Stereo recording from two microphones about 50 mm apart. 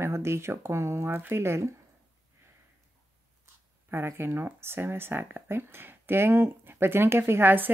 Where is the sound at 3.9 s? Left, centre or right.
Right.